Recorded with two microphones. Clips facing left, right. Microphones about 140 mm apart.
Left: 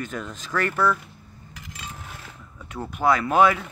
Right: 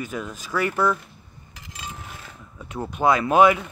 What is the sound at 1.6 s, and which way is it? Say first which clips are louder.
Coin: right 1 dB; 25° right (ahead or behind).